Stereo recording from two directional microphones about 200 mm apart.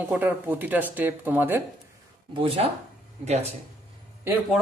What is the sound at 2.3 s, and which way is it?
Speech, 30° right (ahead or behind).